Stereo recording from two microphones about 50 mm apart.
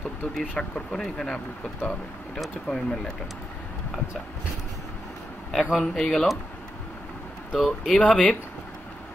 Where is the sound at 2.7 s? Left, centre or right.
Centre.